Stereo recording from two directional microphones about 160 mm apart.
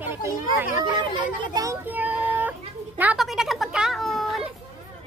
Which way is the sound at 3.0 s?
5° right (ahead or behind).